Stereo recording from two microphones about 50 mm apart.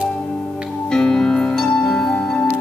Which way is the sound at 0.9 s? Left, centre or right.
Centre.